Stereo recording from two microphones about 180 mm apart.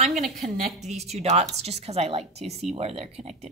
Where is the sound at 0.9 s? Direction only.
35° right (ahead or behind).